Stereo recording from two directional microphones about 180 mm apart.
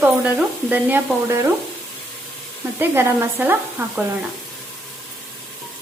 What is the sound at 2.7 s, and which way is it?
Speech, 15° right (ahead or behind).